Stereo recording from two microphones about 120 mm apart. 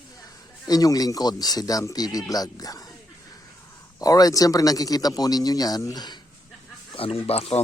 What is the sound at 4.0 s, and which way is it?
Speech, 30° left (ahead or behind).